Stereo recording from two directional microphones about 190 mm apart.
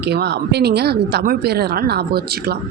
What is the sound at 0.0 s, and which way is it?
A woman's voice, 60° right (ahead or behind).